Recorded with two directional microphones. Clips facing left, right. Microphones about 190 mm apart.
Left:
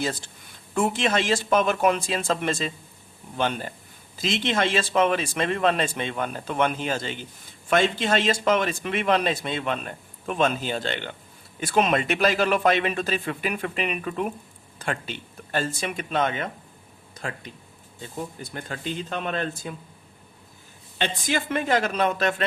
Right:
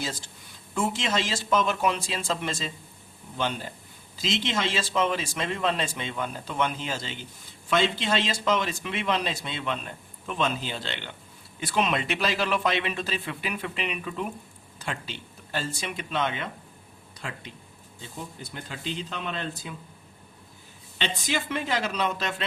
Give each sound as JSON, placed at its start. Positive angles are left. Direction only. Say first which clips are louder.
{"t": 0.7, "sound": "speech", "louder": "left 4 dB", "side_deg": 55}
{"t": 18.5, "sound": "speech", "louder": "left 3 dB", "side_deg": 50}
{"t": 21.0, "sound": "speech", "louder": "left 3 dB", "side_deg": 50}